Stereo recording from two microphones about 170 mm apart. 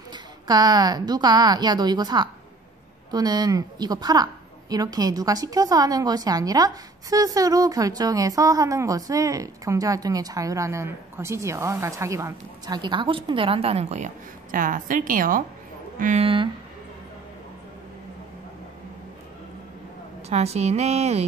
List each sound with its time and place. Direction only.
0.1 s a woman's voice: 25° right (ahead or behind); by 16.3 s 45° right (ahead or behind)
20.2 s speech: 40° right (ahead or behind)